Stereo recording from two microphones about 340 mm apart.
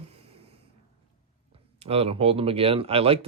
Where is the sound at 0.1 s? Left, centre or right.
Centre.